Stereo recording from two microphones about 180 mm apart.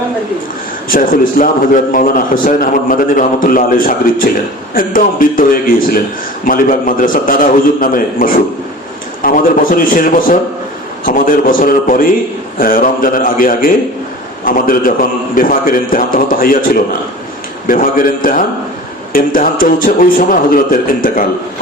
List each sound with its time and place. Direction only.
0.9 s a man's voice: 50° left (ahead or behind)
17.7 s a man's voice: 50° left (ahead or behind)